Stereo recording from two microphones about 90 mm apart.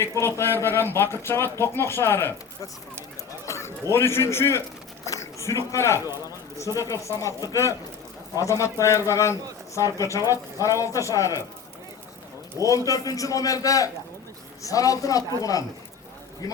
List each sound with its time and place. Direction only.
0.2 s speech: 25° left (ahead or behind)
3.4 s a sound: 30° left (ahead or behind)
3.9 s speech: 30° left (ahead or behind)
5.0 s a sound: 35° left (ahead or behind)
6.2 s a man's voice: 40° left (ahead or behind)
12.5 s a man's voice: 40° left (ahead or behind)